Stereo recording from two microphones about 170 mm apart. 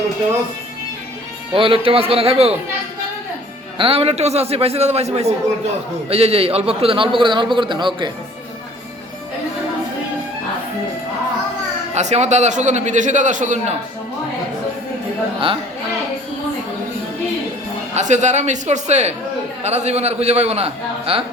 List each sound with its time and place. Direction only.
1.5 s a man's voice: 30° right (ahead or behind)
3.8 s a man's voice: 35° right (ahead or behind)
11.9 s a man's voice: 40° right (ahead or behind)
17.9 s a man's voice: 45° right (ahead or behind)